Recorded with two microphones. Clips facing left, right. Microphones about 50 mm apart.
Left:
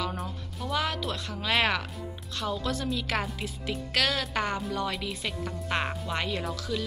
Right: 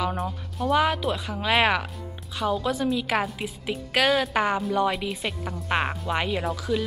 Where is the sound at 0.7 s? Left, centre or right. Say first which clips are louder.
Right 8 dB; centre.